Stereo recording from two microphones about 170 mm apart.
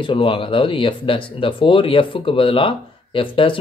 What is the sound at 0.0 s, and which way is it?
Speech, 30° left (ahead or behind).